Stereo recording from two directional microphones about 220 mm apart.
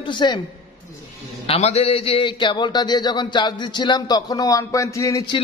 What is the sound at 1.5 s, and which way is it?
A man's voice, 30° left (ahead or behind).